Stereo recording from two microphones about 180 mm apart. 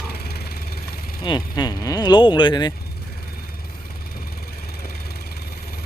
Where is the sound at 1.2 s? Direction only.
25° left (ahead or behind).